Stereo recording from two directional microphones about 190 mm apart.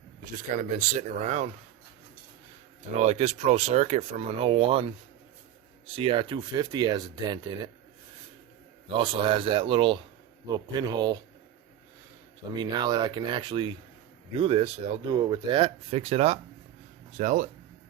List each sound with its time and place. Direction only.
0.3 s speech: 45° right (ahead or behind)
3.0 s speech: 35° right (ahead or behind)
8.9 s speech: 25° right (ahead or behind)
12.5 s speech: 20° right (ahead or behind); by 17.5 s 40° right (ahead or behind)